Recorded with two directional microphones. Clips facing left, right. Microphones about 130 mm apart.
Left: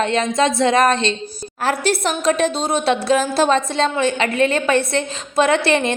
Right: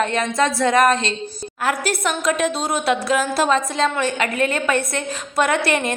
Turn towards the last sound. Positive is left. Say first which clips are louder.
# left 3 dB
turn(degrees=25)  # may be behind; listen again after turning